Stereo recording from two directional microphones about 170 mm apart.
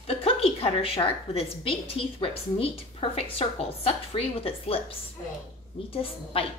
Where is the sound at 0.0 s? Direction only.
35° left (ahead or behind).